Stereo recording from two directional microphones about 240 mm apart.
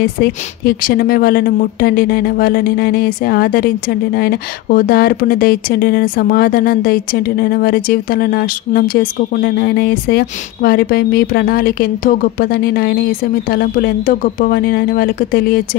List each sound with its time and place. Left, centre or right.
0.0 s speech: left